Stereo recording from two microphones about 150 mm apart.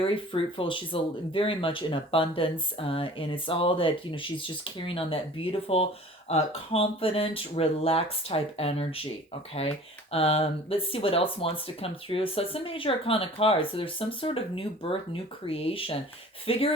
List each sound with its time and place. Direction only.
0.0 s speech: 35° left (ahead or behind)